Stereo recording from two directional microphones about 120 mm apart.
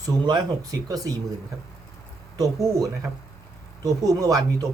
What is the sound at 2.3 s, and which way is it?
Speech, 30° right (ahead or behind).